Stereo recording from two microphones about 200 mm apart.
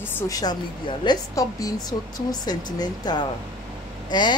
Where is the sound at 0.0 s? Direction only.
15° left (ahead or behind).